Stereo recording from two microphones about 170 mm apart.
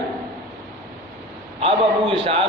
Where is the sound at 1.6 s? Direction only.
30° right (ahead or behind).